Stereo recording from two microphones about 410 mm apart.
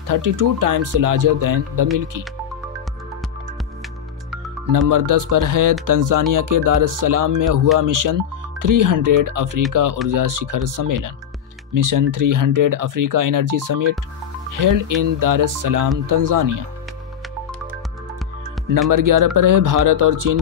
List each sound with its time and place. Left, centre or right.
0.0 s speech: right
4.8 s speech: right
18.9 s speech: right